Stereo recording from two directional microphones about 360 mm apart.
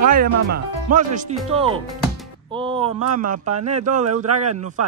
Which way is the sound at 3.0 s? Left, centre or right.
Right.